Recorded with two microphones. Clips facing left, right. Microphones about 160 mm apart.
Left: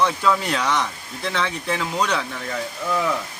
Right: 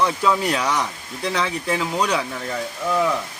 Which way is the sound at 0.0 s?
5° right (ahead or behind).